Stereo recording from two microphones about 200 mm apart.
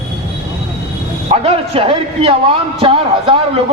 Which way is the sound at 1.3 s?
30° right (ahead or behind).